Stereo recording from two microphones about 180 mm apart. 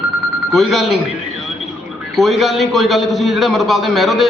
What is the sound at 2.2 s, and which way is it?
A man's voice, centre (ahead or behind).